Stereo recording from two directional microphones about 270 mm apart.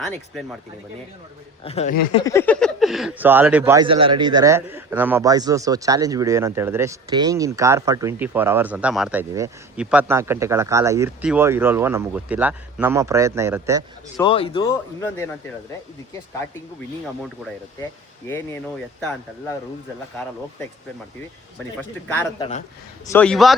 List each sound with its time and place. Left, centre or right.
0.0 s a man's voice: centre
1.6 s speech: left
2.2 s speech: centre
14.2 s speech: centre
22.0 s a man's voice: centre